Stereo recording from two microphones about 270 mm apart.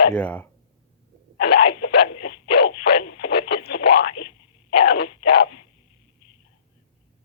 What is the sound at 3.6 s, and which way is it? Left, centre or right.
Radio, left.